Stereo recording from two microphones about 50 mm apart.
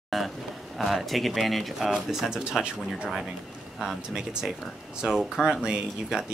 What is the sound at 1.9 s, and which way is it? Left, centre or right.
Speech, centre.